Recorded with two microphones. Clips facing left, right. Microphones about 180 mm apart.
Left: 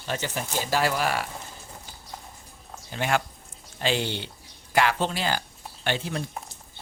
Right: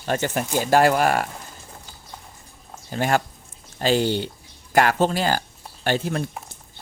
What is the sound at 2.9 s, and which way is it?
Speech, 40° right (ahead or behind).